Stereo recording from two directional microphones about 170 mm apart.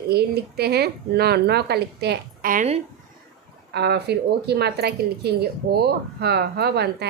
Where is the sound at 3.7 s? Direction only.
75° right (ahead or behind).